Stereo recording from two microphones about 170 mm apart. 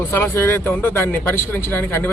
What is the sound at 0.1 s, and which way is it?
Speech, 15° left (ahead or behind).